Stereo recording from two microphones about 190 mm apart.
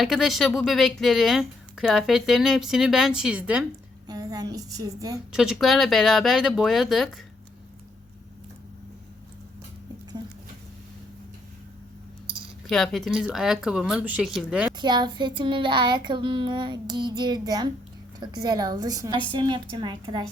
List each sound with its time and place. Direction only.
0.0 s speech: centre (ahead or behind)
4.0 s child singing: 20° right (ahead or behind)
5.3 s speech: 5° right (ahead or behind)
12.6 s speech: centre (ahead or behind)
14.8 s child singing: 25° right (ahead or behind)